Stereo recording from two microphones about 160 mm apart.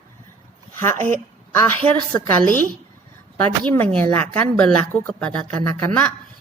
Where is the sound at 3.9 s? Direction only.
10° left (ahead or behind).